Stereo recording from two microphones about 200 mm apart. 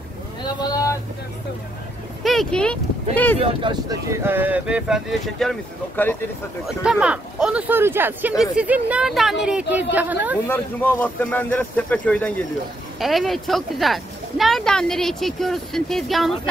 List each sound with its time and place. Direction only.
0.4 s vehicle: 20° left (ahead or behind)
2.2 s speech: centre (ahead or behind)
3.3 s speech: 25° right (ahead or behind)
10.4 s speech: 10° left (ahead or behind)